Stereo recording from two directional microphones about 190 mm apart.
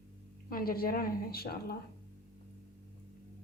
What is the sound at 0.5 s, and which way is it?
A woman's voice, 50° left (ahead or behind).